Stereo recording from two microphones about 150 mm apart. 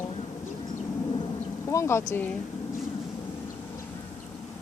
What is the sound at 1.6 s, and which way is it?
Speech, 20° left (ahead or behind).